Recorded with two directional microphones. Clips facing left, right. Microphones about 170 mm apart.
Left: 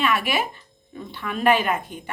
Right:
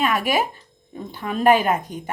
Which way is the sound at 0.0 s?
45° right (ahead or behind).